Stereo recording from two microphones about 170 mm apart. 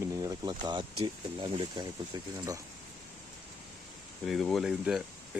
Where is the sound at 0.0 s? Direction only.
20° right (ahead or behind).